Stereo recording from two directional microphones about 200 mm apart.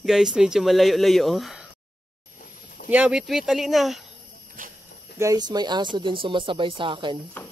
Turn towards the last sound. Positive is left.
turn(degrees=-25)  # may be behind; listen again after turning